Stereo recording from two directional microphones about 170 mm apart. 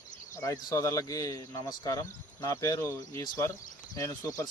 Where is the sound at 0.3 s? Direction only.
20° left (ahead or behind).